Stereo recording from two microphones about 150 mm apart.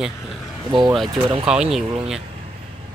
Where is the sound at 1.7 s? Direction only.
5° right (ahead or behind).